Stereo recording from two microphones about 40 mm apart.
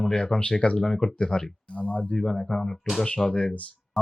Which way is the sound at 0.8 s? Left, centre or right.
Centre.